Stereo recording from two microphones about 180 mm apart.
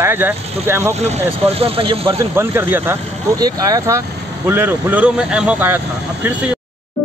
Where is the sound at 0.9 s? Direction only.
40° right (ahead or behind).